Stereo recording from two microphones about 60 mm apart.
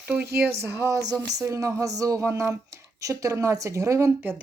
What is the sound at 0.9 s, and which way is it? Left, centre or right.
Speech, right.